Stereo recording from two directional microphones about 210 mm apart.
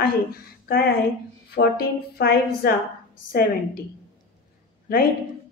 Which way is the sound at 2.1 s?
50° left (ahead or behind).